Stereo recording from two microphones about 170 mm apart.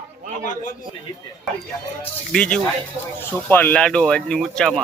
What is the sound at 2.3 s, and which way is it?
Speech, 5° left (ahead or behind).